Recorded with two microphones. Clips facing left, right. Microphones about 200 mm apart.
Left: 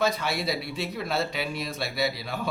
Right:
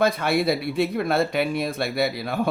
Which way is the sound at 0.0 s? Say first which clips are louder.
Right 6 dB; 55° right (ahead or behind).